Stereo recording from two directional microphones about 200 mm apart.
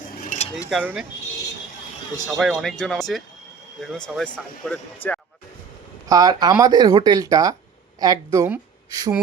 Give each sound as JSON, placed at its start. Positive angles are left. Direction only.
{"t": 0.3, "sound": "a sound", "side_deg": 40}
{"t": 0.7, "sound": "speech", "side_deg": -5}
{"t": 2.2, "sound": "speech", "side_deg": 0}
{"t": 6.1, "sound": "a woman's voice", "side_deg": -20}